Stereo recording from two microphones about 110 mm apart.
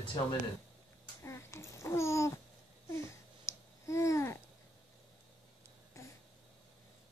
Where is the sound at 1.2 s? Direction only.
25° left (ahead or behind).